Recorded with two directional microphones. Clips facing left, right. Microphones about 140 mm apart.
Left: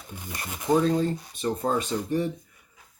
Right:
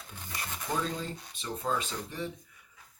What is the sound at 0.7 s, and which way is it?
Speech, 45° left (ahead or behind).